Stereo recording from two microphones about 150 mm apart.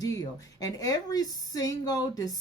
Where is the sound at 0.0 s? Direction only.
25° left (ahead or behind).